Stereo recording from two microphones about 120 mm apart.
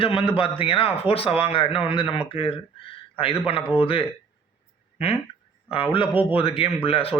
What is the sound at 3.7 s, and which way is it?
A man's voice, 50° left (ahead or behind).